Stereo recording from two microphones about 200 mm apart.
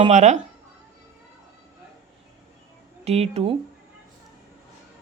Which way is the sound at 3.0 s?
30° right (ahead or behind).